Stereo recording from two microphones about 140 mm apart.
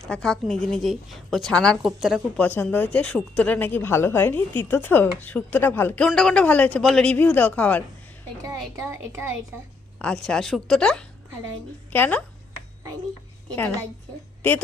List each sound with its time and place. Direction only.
0.1 s a woman's voice: 5° left (ahead or behind)
2.3 s speech: 15° left (ahead or behind)
8.4 s speech: 20° right (ahead or behind)
10.0 s a woman's voice: 5° left (ahead or behind)